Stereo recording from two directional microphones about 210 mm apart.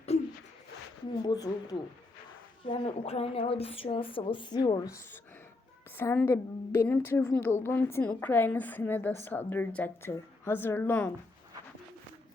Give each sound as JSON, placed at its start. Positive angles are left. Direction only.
{"t": 1.2, "sound": "a woman's voice", "side_deg": 20}